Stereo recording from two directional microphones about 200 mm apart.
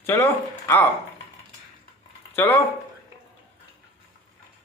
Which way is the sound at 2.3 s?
15° left (ahead or behind).